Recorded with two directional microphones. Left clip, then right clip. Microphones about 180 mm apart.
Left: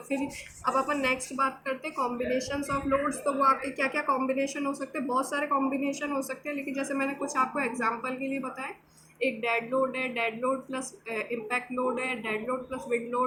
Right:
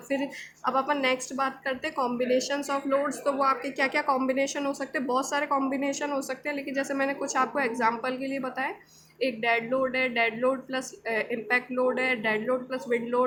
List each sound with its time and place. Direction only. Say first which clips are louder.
0.6 s a woman's voice: right 1 dB; 45° right (ahead or behind)